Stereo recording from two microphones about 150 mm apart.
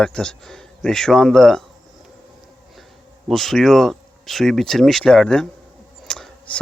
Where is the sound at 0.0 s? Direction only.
5° left (ahead or behind).